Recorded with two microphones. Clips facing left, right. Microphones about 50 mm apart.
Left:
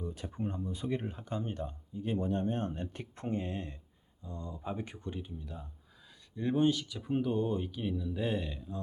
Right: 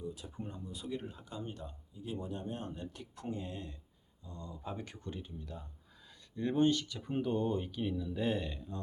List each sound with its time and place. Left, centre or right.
0.0 s speech: left
2.2 s speech: left
2.8 s speech: left; by 8.8 s centre